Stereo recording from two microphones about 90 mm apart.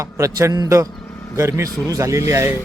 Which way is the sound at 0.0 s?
40° right (ahead or behind).